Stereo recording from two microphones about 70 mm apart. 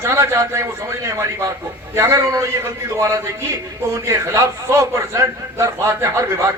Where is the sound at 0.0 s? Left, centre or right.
Right.